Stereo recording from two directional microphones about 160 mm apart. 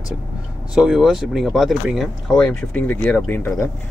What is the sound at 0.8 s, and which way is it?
Speech, 5° right (ahead or behind).